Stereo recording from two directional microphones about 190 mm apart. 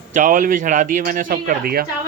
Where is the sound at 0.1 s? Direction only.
45° right (ahead or behind).